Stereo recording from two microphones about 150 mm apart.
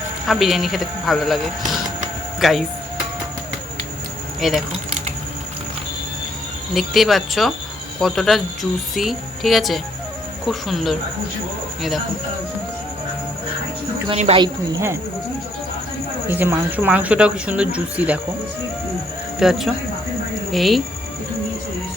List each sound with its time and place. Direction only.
0.3 s speech: centre (ahead or behind)
4.4 s speech: centre (ahead or behind)
6.7 s speech: centre (ahead or behind)
14.3 s speech: 30° right (ahead or behind)
16.3 s speech: 15° right (ahead or behind)
19.4 s speech: centre (ahead or behind)